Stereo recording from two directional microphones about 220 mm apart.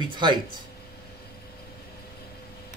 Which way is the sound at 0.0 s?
20° right (ahead or behind).